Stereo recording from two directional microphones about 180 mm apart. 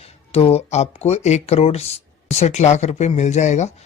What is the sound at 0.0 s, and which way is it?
Speech, 35° left (ahead or behind).